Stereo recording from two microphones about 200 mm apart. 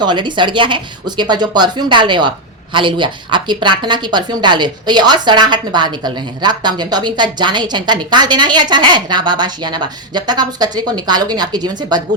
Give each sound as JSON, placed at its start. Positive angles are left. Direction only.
{"t": 0.0, "sound": "speech", "side_deg": -20}